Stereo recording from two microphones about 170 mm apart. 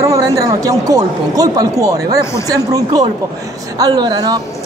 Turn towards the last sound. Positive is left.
turn(degrees=-25)  # may be behind; listen again after turning